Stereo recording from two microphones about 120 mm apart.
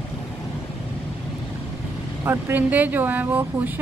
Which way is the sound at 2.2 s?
15° right (ahead or behind).